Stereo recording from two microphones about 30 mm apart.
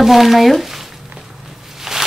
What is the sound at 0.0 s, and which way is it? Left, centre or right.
Speech, centre.